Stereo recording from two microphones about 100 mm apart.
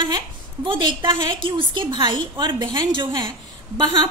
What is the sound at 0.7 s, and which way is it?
A woman's voice, 55° right (ahead or behind).